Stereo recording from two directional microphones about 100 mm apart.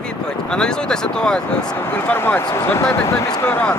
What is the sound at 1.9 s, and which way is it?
Speech, 20° left (ahead or behind).